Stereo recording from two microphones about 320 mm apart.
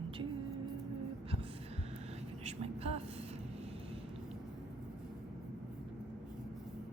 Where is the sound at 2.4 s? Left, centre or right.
Centre.